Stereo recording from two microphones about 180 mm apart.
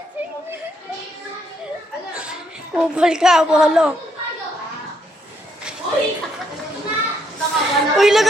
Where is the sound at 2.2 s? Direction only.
5° right (ahead or behind).